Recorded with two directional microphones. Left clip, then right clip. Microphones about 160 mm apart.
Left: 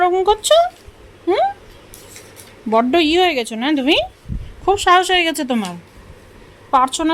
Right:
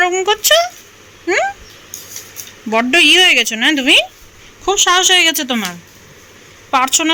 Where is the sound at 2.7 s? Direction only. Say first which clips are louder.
Right 4 dB; 15° left (ahead or behind).